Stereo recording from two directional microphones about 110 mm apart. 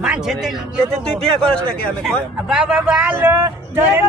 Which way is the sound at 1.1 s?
10° left (ahead or behind).